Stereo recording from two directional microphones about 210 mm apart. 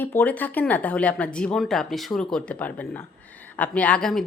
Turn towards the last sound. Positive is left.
turn(degrees=5)  # may be behind; listen again after turning